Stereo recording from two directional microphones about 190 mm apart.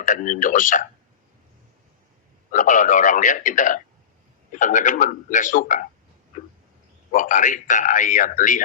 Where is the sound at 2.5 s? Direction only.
40° left (ahead or behind).